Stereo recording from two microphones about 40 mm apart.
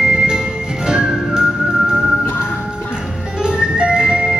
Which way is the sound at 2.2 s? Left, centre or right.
Left.